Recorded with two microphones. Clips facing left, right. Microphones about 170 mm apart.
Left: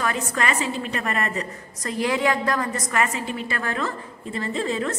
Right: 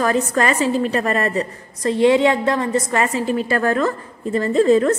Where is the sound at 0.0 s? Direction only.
40° right (ahead or behind).